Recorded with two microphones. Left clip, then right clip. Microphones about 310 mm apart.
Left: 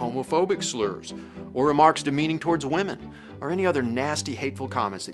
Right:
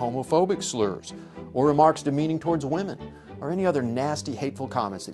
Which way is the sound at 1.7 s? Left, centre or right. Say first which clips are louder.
Left 2 dB; right.